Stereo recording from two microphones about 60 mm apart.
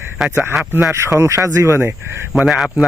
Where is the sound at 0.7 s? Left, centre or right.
Right.